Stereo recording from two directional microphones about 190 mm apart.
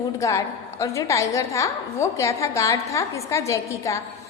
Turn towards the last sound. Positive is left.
turn(degrees=15)  # may be behind; listen again after turning